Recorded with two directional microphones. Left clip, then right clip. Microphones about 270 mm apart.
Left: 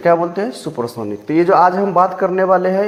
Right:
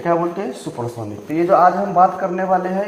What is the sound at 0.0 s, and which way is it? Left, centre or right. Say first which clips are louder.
A man's voice: left 5 dB; left.